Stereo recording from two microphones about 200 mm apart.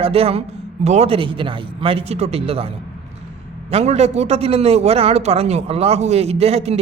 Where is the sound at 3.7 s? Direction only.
35° right (ahead or behind).